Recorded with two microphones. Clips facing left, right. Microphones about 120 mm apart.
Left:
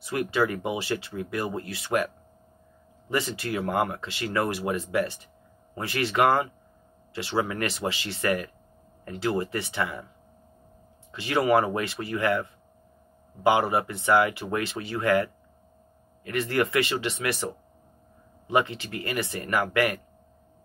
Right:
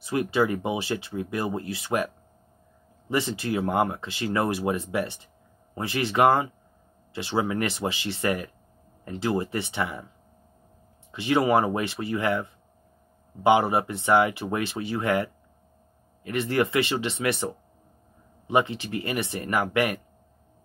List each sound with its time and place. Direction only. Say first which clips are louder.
0.0 s speech: right 2 dB; 25° right (ahead or behind)
3.1 s speech: right 2 dB; 25° right (ahead or behind)
11.1 s speech: right 1 dB; 25° right (ahead or behind)